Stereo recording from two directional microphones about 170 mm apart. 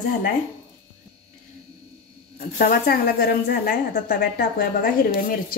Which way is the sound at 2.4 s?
65° left (ahead or behind).